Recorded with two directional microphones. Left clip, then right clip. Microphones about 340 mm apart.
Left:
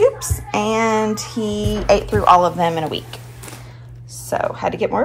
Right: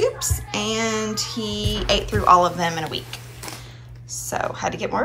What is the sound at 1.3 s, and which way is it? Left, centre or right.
Music, right.